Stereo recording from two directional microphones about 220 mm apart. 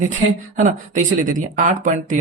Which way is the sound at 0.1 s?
35° right (ahead or behind).